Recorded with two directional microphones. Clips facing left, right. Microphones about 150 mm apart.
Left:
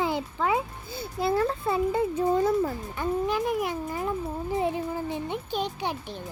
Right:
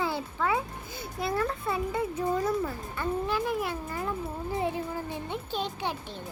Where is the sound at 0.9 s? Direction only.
30° left (ahead or behind).